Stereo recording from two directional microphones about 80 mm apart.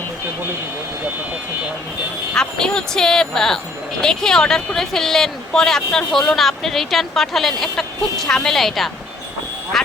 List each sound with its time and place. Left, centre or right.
2.3 s speech: centre
9.7 s quack: centre